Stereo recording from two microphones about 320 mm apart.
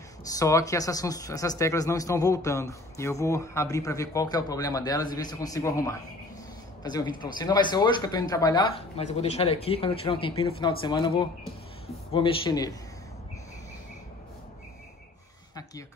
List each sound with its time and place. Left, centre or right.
0.3 s speech: centre